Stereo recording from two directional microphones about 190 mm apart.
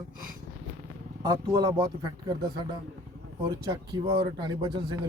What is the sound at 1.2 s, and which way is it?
Speech, 20° right (ahead or behind).